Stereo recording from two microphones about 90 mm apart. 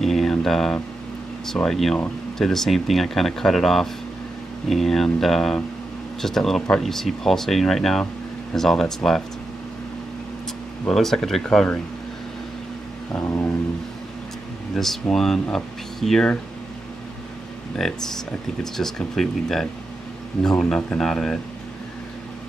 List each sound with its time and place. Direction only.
0.0 s a sound: 5° left (ahead or behind)
1.4 s speech: 5° left (ahead or behind)
10.9 s speech: 5° left (ahead or behind)
13.2 s a sound: 25° left (ahead or behind)
14.8 s speech: 5° left (ahead or behind)
18.6 s speech: 5° left (ahead or behind)